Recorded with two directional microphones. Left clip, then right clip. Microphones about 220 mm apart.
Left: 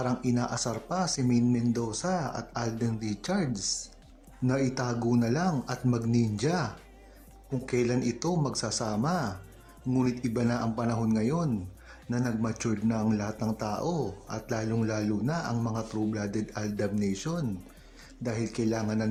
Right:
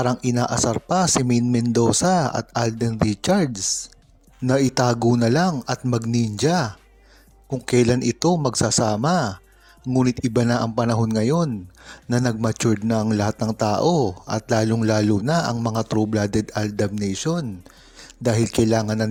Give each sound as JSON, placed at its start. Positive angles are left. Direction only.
{"t": 0.0, "sound": "speech", "side_deg": -40}